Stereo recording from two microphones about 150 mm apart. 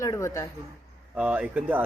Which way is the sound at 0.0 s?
20° left (ahead or behind).